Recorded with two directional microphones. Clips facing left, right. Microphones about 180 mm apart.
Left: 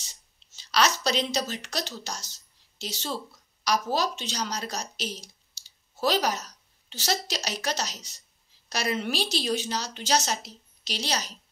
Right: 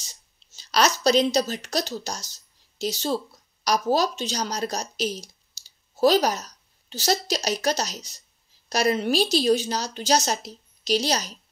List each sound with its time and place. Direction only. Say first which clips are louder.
0.6 s a woman's voice: right 3 dB; 40° right (ahead or behind)